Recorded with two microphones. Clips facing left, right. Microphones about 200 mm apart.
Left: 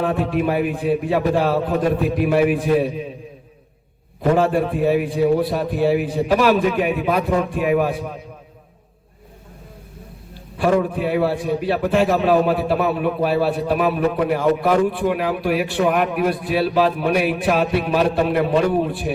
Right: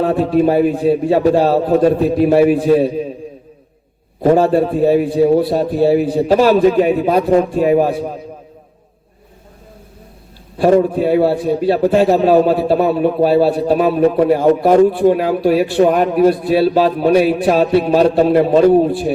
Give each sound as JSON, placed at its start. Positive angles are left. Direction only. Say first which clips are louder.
{"t": 0.0, "sound": "a man's voice", "louder": "right 7 dB", "side_deg": -35}
{"t": 4.2, "sound": "a man's voice", "louder": "right 6 dB", "side_deg": -30}
{"t": 10.6, "sound": "a man's voice", "louder": "right 6 dB", "side_deg": -35}